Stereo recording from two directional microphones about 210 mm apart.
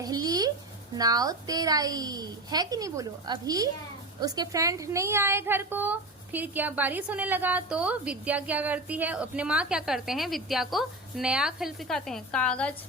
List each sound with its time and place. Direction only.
0.0 s a woman's voice: 20° right (ahead or behind); by 12.7 s 5° left (ahead or behind)